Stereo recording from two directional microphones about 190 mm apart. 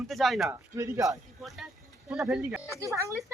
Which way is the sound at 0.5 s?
15° right (ahead or behind).